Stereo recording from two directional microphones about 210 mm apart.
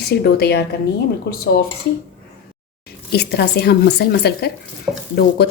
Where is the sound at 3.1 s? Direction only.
50° left (ahead or behind).